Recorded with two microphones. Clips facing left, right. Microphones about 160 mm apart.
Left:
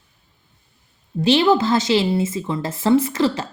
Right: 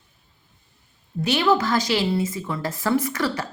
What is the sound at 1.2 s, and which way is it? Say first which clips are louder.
A woman's voice: left 5 dB; 30° left (ahead or behind).